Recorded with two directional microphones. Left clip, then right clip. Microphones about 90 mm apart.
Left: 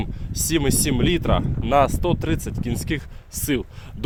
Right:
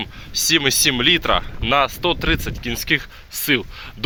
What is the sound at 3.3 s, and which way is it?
Speech, 50° left (ahead or behind).